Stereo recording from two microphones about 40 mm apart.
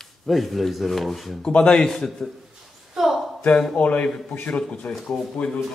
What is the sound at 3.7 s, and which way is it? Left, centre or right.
Speech, left.